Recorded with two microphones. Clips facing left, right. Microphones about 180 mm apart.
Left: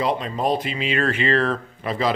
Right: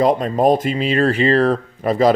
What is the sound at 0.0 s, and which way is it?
Speech, 45° right (ahead or behind).